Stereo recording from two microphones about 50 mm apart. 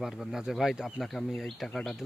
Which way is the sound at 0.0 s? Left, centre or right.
Centre.